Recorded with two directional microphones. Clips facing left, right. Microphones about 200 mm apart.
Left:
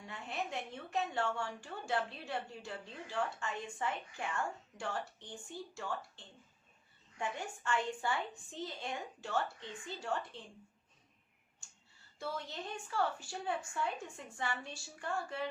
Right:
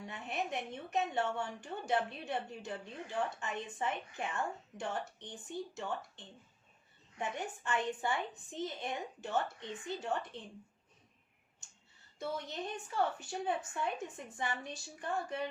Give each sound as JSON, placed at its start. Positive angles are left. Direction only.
{"t": 0.1, "sound": "a woman's voice", "side_deg": -20}
{"t": 12.2, "sound": "a woman's voice", "side_deg": -20}